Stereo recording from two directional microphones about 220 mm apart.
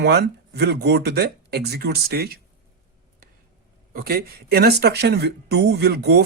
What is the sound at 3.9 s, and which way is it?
Speech, 45° right (ahead or behind).